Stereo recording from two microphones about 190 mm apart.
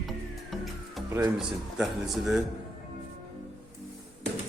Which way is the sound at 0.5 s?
Centre (ahead or behind).